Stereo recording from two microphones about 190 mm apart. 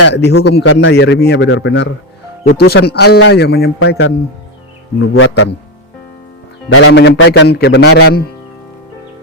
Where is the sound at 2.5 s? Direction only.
60° left (ahead or behind).